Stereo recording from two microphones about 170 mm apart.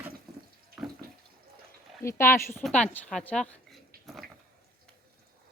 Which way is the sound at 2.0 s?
15° left (ahead or behind).